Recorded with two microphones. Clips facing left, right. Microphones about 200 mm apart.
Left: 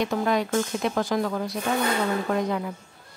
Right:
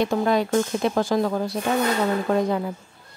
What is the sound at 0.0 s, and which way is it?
Speech, 30° right (ahead or behind).